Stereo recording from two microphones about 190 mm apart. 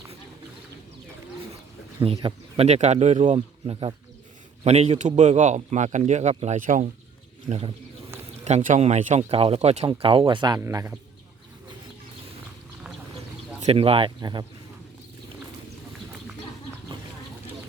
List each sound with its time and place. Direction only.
2.2 s a man's voice: 35° right (ahead or behind)
8.4 s a man's voice: 40° right (ahead or behind); by 10.9 s 15° right (ahead or behind)
13.6 s speech: 30° right (ahead or behind)